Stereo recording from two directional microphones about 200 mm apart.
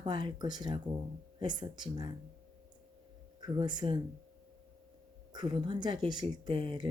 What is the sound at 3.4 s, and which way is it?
Speech, 20° right (ahead or behind).